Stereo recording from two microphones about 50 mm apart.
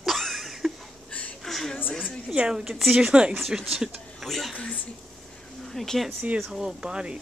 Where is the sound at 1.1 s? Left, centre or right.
Left.